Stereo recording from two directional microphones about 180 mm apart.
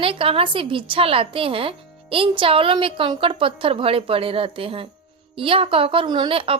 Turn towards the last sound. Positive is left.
turn(degrees=-30)  # may be behind; listen again after turning